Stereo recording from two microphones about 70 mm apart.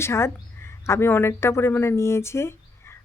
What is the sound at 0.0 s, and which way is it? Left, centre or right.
Speech, left.